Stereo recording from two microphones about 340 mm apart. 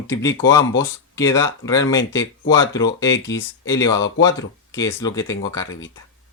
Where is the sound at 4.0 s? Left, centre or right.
Left.